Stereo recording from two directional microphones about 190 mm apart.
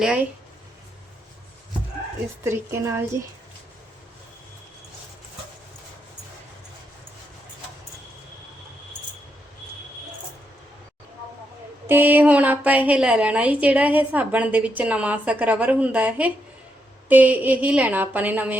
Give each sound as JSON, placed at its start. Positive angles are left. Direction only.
{"t": 0.0, "sound": "speech", "side_deg": -5}
{"t": 2.4, "sound": "a woman's voice", "side_deg": -15}
{"t": 11.9, "sound": "a woman's voice", "side_deg": -10}